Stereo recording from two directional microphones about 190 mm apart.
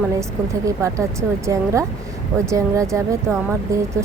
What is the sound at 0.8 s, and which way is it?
Speech, 15° right (ahead or behind).